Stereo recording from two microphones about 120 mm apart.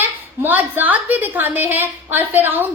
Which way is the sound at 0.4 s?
15° right (ahead or behind).